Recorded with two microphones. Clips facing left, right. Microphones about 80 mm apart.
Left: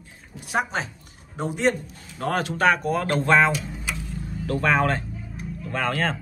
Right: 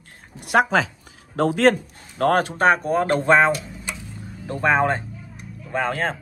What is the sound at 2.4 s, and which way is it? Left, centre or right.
Speech, right.